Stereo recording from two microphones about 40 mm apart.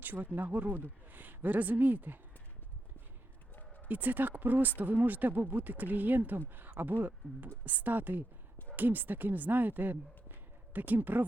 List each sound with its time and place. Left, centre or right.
0.0 s speech: right
3.8 s speech: right